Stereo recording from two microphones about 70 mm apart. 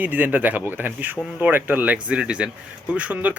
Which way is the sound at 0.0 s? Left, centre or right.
Right.